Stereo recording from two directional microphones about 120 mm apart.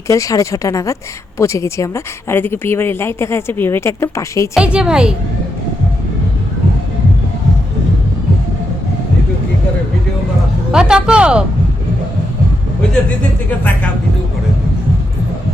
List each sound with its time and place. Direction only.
0.1 s speech: 25° left (ahead or behind)
4.5 s speech: 5° right (ahead or behind)
10.7 s speech: 5° right (ahead or behind)